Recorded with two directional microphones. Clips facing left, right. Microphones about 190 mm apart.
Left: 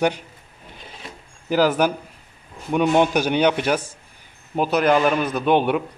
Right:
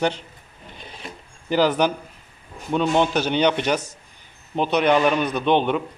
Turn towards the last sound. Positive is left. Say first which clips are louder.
# left 1 dB
turn(degrees=10)  # may be behind; listen again after turning